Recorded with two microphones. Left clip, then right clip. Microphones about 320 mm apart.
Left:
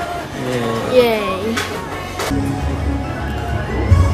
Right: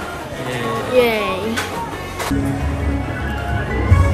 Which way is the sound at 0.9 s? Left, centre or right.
Centre.